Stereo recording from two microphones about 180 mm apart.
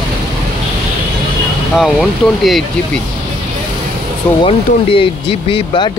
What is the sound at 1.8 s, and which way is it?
Speech, centre (ahead or behind).